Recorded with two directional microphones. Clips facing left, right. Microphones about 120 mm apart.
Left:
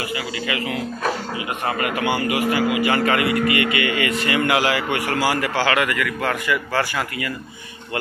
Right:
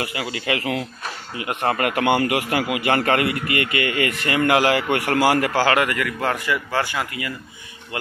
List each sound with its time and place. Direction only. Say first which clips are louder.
0.0 s a man's voice: even; 65° right (ahead or behind)
5.6 s speech: right 1 dB; 40° right (ahead or behind); by 7.3 s 20° right (ahead or behind)